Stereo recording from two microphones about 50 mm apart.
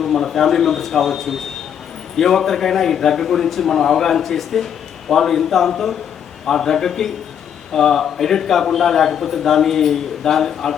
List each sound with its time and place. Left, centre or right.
0.0 s a man's voice: centre